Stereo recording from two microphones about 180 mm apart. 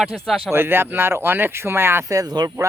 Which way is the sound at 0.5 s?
10° right (ahead or behind).